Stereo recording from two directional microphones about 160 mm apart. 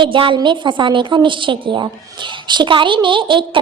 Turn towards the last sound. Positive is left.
turn(degrees=-30)  # may be behind; listen again after turning